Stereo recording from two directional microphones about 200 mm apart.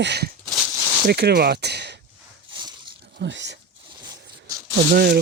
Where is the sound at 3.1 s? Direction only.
60° right (ahead or behind).